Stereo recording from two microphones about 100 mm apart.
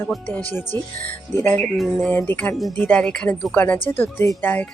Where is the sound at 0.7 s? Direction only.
25° left (ahead or behind).